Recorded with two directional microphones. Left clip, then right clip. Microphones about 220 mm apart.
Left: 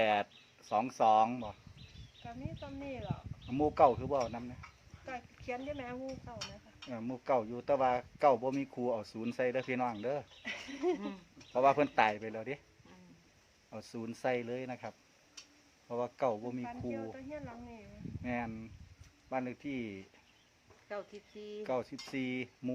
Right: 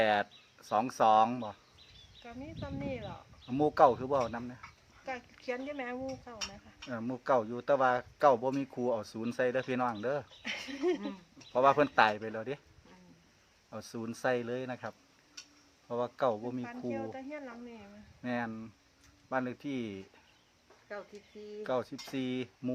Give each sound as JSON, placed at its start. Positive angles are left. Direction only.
{"t": 0.0, "sound": "speech", "side_deg": -15}
{"t": 2.2, "sound": "speech", "side_deg": -55}
{"t": 3.4, "sound": "speech", "side_deg": -20}
{"t": 5.0, "sound": "speech", "side_deg": -50}
{"t": 6.9, "sound": "speech", "side_deg": -20}
{"t": 10.4, "sound": "speech", "side_deg": -50}
{"t": 11.5, "sound": "speech", "side_deg": -15}
{"t": 13.7, "sound": "speech", "side_deg": -15}
{"t": 16.9, "sound": "speech", "side_deg": -55}
{"t": 18.2, "sound": "speech", "side_deg": -15}
{"t": 21.6, "sound": "speech", "side_deg": -10}